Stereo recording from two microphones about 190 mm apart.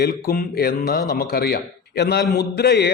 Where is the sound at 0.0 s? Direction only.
50° left (ahead or behind).